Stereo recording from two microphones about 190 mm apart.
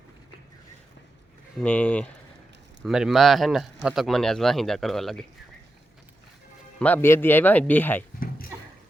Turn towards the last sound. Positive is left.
turn(degrees=10)  # may be behind; listen again after turning